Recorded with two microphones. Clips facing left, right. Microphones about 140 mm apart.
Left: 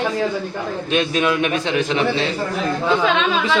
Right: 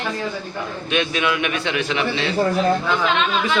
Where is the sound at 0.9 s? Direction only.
40° left (ahead or behind).